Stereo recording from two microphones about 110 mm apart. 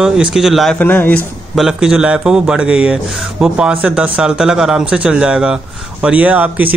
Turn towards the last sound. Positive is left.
turn(degrees=-15)  # may be behind; listen again after turning